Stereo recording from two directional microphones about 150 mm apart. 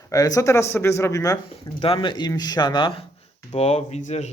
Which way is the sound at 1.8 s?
35° left (ahead or behind).